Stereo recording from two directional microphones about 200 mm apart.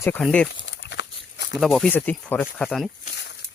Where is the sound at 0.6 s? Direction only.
65° left (ahead or behind).